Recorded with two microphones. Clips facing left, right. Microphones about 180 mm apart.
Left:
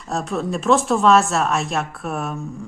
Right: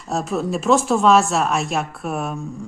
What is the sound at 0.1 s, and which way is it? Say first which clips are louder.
A woman's voice: right 1 dB; centre (ahead or behind).